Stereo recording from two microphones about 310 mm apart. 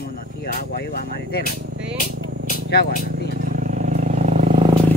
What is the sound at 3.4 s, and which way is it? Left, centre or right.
Vehicle, right.